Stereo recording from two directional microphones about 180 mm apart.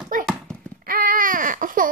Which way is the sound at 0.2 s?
Centre (ahead or behind).